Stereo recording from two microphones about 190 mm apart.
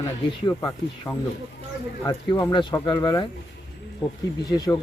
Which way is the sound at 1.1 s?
10° left (ahead or behind).